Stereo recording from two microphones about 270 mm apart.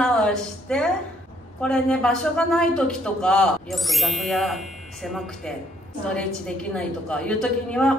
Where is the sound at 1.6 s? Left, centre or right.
Centre.